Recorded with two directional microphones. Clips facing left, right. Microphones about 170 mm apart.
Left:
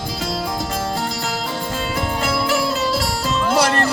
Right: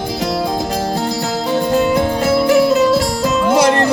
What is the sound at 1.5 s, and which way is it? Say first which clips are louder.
Music: right 10 dB; 25° right (ahead or behind).